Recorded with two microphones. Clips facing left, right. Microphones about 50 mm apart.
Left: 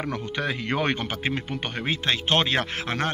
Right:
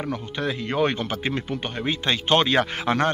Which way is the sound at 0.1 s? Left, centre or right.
Left.